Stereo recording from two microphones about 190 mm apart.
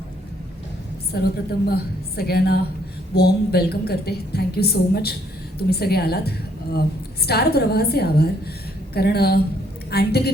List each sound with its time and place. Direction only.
1.1 s a woman's voice: 55° left (ahead or behind)